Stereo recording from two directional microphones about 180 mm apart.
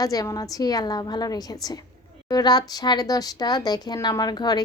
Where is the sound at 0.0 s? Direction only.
20° left (ahead or behind).